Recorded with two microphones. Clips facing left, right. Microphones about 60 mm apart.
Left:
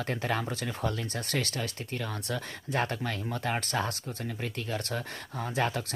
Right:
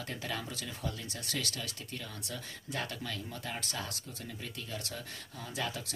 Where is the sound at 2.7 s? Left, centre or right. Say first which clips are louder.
Left 8 dB; left.